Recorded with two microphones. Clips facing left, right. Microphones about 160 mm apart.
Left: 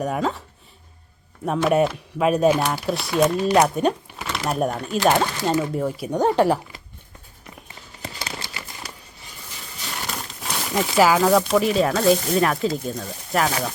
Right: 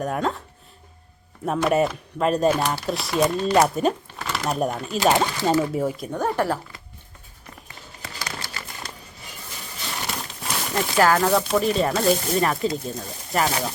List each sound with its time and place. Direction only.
0.0 s speech: centre (ahead or behind)
1.5 s speech: centre (ahead or behind)
6.1 s speech: 20° left (ahead or behind)
8.0 s crumpling: 25° left (ahead or behind)
10.1 s speech: centre (ahead or behind)